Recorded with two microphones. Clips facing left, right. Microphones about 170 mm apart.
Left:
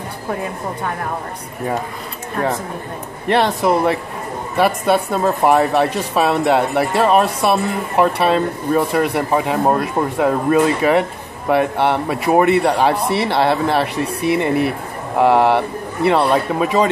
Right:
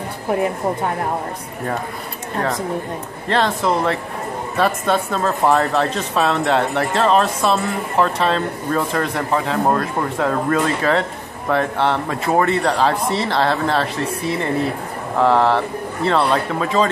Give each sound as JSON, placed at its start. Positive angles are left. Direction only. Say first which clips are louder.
{"t": 3.3, "sound": "speech", "louder": "left 3 dB", "side_deg": 15}